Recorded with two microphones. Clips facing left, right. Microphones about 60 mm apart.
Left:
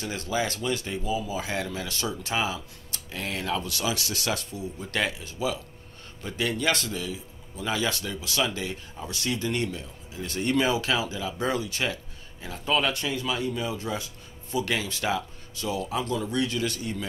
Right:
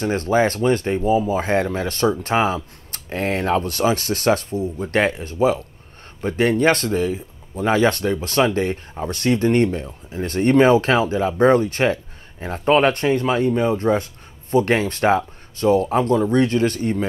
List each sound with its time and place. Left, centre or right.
0.0 s a man's voice: right